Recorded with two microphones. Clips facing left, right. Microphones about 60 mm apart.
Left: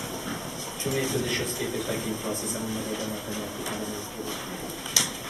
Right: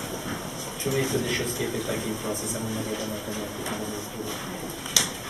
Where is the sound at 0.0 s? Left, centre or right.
Centre.